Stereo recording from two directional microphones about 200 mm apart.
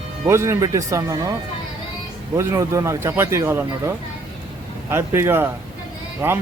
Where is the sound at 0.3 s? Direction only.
15° right (ahead or behind).